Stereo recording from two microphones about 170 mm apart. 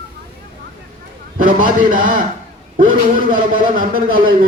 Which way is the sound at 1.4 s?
55° right (ahead or behind).